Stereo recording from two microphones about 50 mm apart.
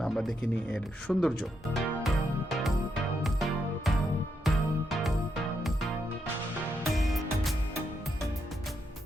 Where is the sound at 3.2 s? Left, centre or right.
Centre.